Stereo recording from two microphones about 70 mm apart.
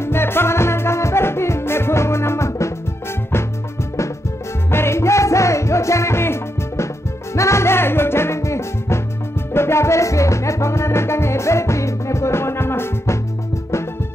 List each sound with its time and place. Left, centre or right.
0.0 s music: left
4.6 s music: left